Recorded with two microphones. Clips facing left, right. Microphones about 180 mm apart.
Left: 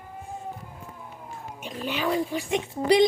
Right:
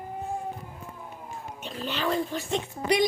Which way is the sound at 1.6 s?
10° left (ahead or behind).